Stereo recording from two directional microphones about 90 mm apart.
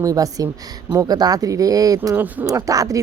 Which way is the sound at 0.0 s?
40° right (ahead or behind).